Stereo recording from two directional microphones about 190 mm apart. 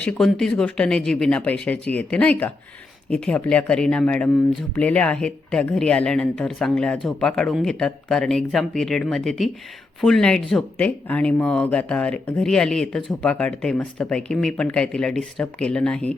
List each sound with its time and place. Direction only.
0.0 s speech: 5° left (ahead or behind)